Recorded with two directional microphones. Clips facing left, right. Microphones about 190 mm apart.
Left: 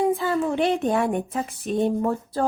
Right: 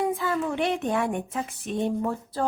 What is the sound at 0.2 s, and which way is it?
A woman's voice, 30° left (ahead or behind).